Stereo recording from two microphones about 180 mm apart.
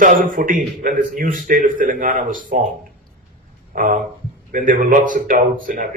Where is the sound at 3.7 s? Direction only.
50° right (ahead or behind).